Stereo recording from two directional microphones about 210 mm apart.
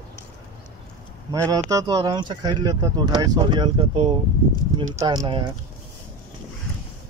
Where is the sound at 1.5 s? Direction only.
15° right (ahead or behind).